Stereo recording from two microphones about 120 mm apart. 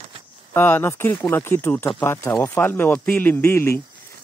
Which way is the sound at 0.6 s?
20° left (ahead or behind).